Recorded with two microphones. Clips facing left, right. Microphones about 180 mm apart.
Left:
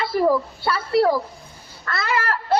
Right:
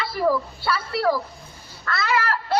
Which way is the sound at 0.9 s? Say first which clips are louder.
Left 5 dB; 25° left (ahead or behind).